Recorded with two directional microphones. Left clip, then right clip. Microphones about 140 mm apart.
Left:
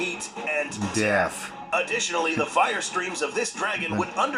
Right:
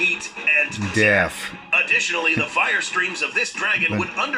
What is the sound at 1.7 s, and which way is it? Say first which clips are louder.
Speech: right 6 dB; 35° left (ahead or behind).